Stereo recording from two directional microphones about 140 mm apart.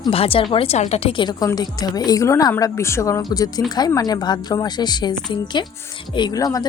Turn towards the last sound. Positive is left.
turn(degrees=25)  # may be behind; listen again after turning